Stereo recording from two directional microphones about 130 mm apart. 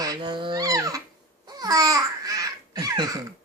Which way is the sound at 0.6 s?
25° right (ahead or behind).